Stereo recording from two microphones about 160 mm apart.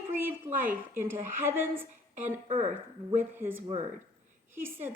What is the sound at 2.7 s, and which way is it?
A woman's voice, 10° right (ahead or behind).